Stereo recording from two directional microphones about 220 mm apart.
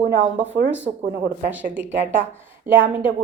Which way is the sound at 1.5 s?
10° right (ahead or behind).